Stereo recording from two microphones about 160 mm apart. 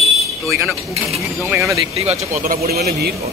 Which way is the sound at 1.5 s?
20° right (ahead or behind).